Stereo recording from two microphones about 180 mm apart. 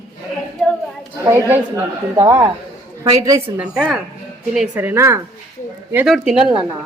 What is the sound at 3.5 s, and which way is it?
Speech, 5° right (ahead or behind).